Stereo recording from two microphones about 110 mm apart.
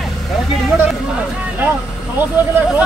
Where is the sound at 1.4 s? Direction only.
15° right (ahead or behind).